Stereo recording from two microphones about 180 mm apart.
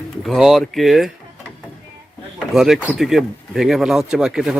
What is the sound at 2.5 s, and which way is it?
Speech, centre (ahead or behind).